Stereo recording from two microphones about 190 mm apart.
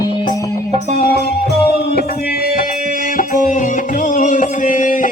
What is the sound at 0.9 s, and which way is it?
Music, 55° left (ahead or behind).